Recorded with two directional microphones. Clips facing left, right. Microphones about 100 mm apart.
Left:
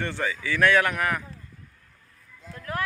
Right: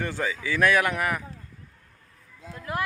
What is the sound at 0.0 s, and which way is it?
Speech, 15° right (ahead or behind).